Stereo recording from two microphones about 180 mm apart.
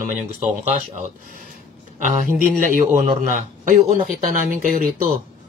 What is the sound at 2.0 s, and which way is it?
Speech, 50° right (ahead or behind).